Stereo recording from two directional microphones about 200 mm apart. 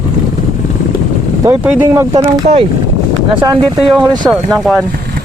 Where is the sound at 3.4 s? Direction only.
20° right (ahead or behind).